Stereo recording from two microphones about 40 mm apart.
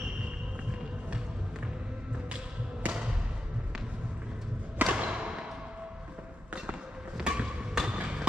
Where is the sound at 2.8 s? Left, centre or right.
Right.